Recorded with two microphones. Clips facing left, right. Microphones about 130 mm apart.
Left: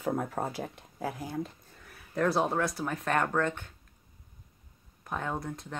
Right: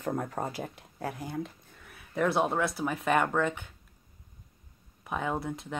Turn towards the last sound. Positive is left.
turn(degrees=-5)  # may be behind; listen again after turning